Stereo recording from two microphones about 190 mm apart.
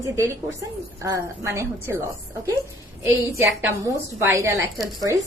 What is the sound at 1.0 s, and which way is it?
Speech, 15° right (ahead or behind).